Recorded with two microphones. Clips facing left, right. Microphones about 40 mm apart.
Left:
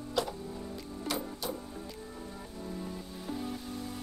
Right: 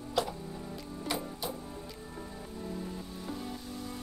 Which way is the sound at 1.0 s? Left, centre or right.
Centre.